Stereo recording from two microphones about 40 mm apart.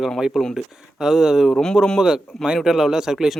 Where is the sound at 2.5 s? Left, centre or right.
Centre.